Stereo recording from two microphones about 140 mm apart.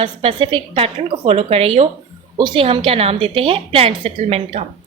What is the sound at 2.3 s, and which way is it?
A woman's voice, 35° right (ahead or behind).